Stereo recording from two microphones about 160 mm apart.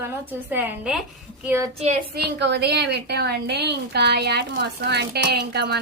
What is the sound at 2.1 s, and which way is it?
Speech, 90° right.